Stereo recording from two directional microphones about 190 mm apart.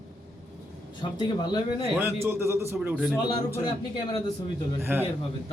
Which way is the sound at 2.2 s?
15° right (ahead or behind).